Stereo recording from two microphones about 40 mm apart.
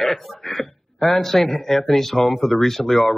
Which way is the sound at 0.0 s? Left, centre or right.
Centre.